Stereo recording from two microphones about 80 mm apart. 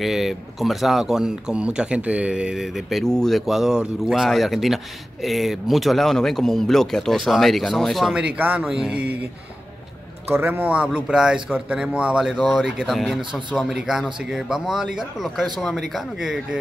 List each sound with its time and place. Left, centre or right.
0.0 s speech: centre
8.2 s speech: centre
8.6 s speech: centre
10.3 s a man's voice: right
10.6 s speech: centre